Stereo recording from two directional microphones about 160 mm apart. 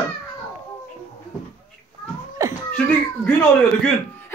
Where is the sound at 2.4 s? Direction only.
20° right (ahead or behind).